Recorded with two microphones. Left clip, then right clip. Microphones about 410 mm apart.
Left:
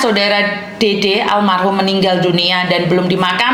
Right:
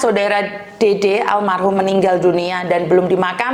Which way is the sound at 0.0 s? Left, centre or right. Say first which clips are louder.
Left 2 dB; right.